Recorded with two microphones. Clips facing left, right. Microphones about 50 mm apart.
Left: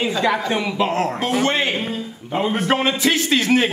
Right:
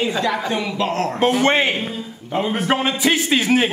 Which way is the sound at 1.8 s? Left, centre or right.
Centre.